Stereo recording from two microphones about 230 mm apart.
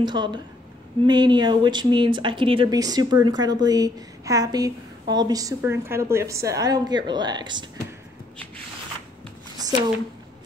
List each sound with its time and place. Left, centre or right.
0.0 s speech: centre